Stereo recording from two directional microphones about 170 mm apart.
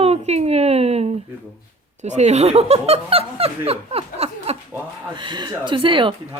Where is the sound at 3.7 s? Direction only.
35° right (ahead or behind).